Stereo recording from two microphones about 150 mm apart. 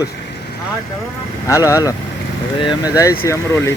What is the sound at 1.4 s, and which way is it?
Speech, 20° left (ahead or behind).